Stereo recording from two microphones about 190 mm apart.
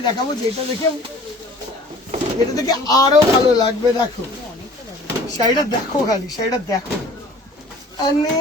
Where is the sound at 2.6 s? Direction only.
20° left (ahead or behind).